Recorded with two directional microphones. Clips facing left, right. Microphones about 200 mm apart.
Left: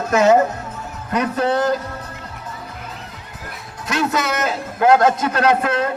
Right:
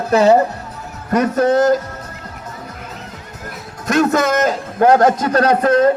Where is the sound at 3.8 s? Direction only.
45° right (ahead or behind).